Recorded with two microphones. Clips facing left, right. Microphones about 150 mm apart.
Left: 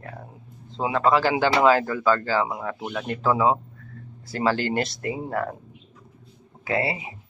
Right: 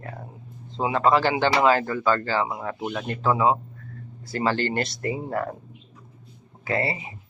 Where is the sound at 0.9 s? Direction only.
Centre (ahead or behind).